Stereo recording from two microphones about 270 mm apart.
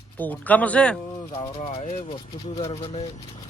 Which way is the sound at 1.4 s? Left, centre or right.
Left.